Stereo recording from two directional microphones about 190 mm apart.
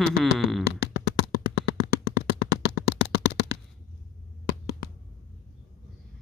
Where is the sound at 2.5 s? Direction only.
60° left (ahead or behind).